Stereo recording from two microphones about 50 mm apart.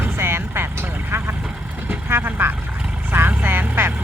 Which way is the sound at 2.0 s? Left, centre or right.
Right.